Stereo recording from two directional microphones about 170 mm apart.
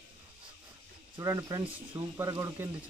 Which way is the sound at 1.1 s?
20° right (ahead or behind).